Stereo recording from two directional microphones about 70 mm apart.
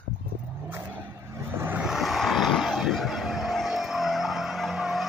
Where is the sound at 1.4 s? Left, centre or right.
Right.